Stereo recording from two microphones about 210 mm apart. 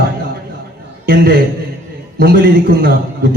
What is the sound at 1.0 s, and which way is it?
A man's voice, 45° right (ahead or behind).